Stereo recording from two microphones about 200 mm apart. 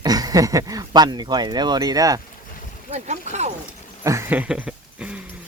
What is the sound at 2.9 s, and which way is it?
Speech, 35° right (ahead or behind).